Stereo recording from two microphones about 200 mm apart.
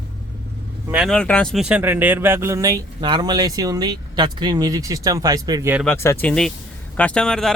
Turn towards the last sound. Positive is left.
turn(degrees=5)  # may be behind; listen again after turning